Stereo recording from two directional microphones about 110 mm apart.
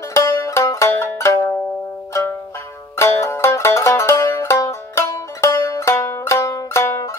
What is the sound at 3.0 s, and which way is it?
Music, 25° left (ahead or behind).